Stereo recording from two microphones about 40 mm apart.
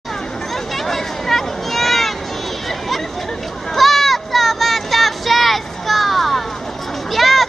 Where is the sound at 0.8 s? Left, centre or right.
Centre.